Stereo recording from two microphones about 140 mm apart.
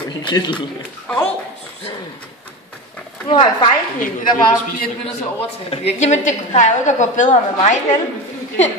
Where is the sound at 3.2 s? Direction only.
40° left (ahead or behind).